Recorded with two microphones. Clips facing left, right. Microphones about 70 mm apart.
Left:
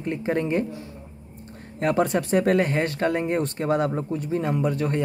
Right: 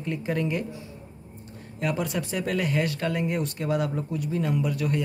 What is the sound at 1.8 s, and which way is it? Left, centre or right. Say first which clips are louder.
Speech: left 6 dB; left.